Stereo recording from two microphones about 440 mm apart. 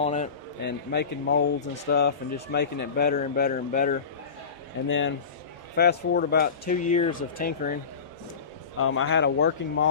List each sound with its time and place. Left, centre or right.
0.0 s a man's voice: centre
8.8 s a man's voice: left